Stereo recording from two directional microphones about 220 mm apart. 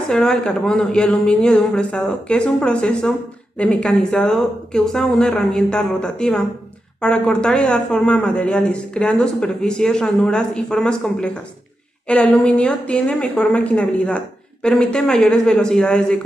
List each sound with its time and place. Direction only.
0.1 s a man's voice: 5° left (ahead or behind)